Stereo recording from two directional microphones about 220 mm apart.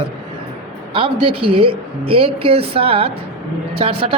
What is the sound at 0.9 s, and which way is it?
Speech, 25° right (ahead or behind).